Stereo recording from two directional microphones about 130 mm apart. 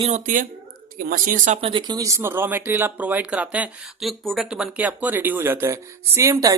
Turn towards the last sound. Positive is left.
turn(degrees=-25)  # may be behind; listen again after turning